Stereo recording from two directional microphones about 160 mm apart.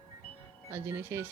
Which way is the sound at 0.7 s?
15° right (ahead or behind).